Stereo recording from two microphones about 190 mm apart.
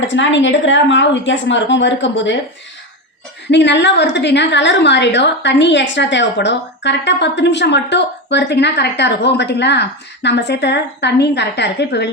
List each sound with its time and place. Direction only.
0.0 s a woman's voice: 75° left (ahead or behind)
3.5 s a woman's voice: 65° left (ahead or behind)